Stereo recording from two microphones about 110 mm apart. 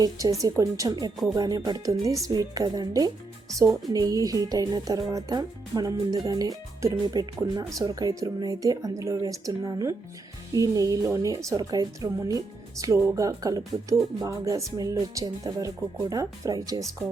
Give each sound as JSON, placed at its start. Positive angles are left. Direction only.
{"t": 0.0, "sound": "speech", "side_deg": -35}